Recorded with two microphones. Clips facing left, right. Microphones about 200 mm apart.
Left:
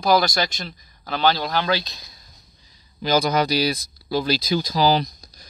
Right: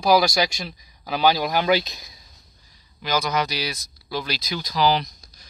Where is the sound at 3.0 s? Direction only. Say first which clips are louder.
Left 4 dB; 30° left (ahead or behind).